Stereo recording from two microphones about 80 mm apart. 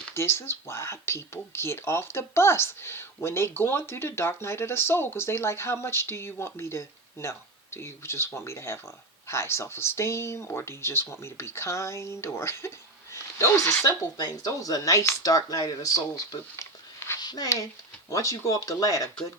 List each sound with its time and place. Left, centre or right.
0.1 s speech: left
14.2 s speech: left
17.2 s speech: left